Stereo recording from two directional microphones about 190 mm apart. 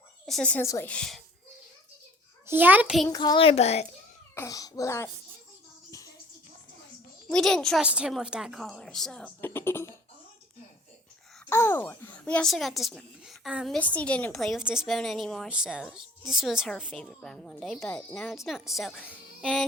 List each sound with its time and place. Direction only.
0.3 s a woman's voice: 5° left (ahead or behind)
2.5 s a child's voice: 10° right (ahead or behind)
3.1 s a child's voice: 20° left (ahead or behind)
4.4 s a woman's voice: 20° left (ahead or behind)
7.3 s a woman's voice: 5° left (ahead or behind)
11.4 s a woman's voice: 15° left (ahead or behind)